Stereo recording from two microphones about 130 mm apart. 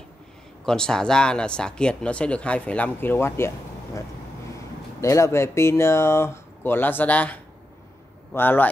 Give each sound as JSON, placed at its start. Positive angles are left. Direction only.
{"t": 0.7, "sound": "speech", "side_deg": 5}
{"t": 5.0, "sound": "speech", "side_deg": 25}